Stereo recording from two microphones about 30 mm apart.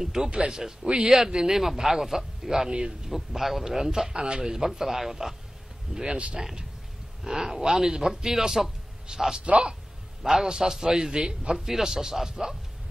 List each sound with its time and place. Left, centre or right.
0.0 s a man's voice: centre
4.1 s a man's voice: right
4.4 s a man's voice: right
5.9 s a sound: right
7.2 s speech: centre
9.1 s a man's voice: right
9.5 s speech: right
10.2 s a man's voice: centre
11.5 s speech: centre